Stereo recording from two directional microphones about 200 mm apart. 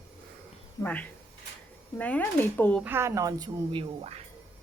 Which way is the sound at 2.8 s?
15° right (ahead or behind).